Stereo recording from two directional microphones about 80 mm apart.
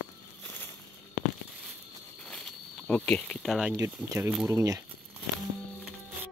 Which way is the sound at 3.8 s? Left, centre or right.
Right.